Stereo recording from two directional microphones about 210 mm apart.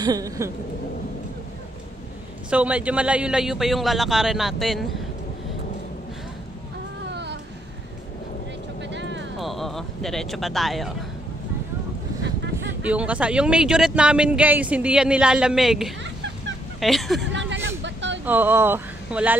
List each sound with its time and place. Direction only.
0.0 s a woman's voice: 15° right (ahead or behind)
2.5 s speech: 5° right (ahead or behind)
7.1 s a sound: 55° right (ahead or behind)
8.9 s vehicle: 60° right (ahead or behind)
9.4 s speech: centre (ahead or behind)
12.8 s speech: 5° right (ahead or behind)
17.3 s a sound: 60° right (ahead or behind)
18.2 s speech: 10° right (ahead or behind)